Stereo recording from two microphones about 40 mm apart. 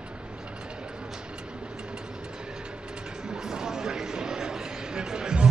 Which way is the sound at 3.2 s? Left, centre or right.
Centre.